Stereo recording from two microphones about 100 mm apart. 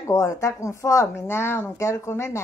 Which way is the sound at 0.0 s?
30° left (ahead or behind).